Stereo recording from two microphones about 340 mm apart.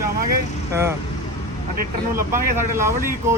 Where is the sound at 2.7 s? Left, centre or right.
Centre.